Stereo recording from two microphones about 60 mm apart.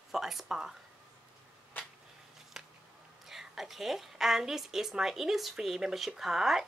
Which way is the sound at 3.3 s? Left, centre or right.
Centre.